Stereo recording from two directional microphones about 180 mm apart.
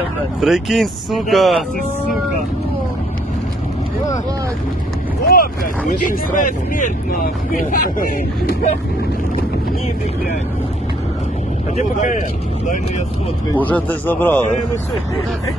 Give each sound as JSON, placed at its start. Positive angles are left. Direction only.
{"t": 0.4, "sound": "speech", "side_deg": 0}
{"t": 5.2, "sound": "speech", "side_deg": 55}
{"t": 11.7, "sound": "speech", "side_deg": 45}
{"t": 13.5, "sound": "a man's voice", "side_deg": 10}